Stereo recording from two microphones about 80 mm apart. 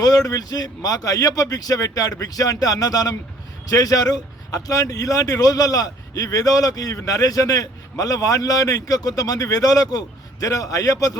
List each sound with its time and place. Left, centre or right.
0.0 s speech: left